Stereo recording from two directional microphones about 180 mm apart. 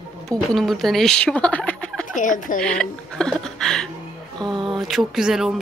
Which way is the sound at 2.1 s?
45° left (ahead or behind).